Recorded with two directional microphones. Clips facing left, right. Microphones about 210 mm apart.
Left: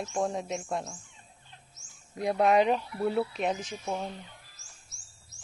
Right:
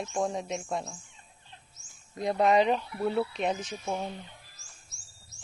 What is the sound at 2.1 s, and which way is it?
Speech, 10° left (ahead or behind).